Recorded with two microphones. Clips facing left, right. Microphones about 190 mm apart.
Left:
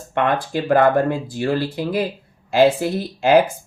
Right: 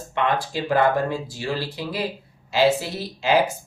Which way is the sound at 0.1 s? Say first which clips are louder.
Left 4 dB; 55° left (ahead or behind).